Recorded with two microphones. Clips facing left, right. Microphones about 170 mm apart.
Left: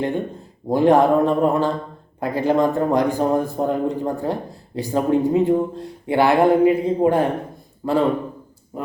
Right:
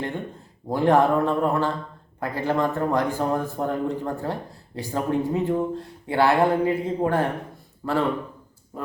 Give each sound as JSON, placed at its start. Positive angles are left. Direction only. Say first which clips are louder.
{"t": 0.7, "sound": "speech", "louder": "left 4 dB", "side_deg": 15}